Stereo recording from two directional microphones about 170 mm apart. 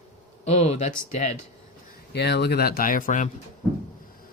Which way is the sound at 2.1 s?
80° left.